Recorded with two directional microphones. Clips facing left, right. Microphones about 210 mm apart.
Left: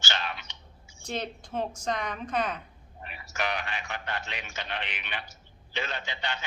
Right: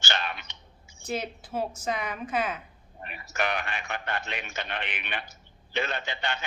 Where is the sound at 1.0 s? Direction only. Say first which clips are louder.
Right 2 dB; 5° right (ahead or behind).